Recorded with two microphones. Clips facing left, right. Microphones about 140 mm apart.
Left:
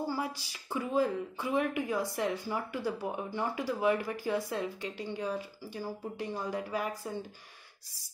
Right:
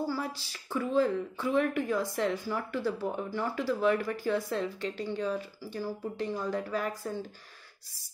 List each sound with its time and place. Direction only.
0.0 s speech: 15° left (ahead or behind)